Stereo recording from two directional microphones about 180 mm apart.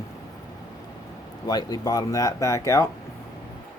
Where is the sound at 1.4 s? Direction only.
20° left (ahead or behind).